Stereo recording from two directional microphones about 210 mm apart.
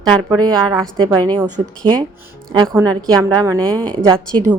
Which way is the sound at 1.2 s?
20° right (ahead or behind).